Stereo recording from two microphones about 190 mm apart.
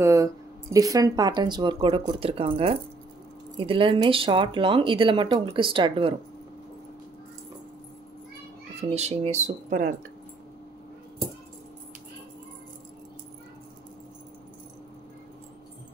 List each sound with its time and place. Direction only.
0.0 s speech: 15° right (ahead or behind)
8.9 s speech: 35° right (ahead or behind)